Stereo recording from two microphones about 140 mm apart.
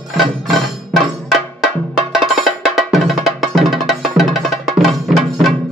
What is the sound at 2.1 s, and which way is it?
Music, centre (ahead or behind).